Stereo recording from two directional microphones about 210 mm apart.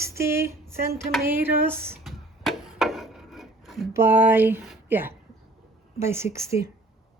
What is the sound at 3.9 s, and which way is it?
Speech, 10° right (ahead or behind).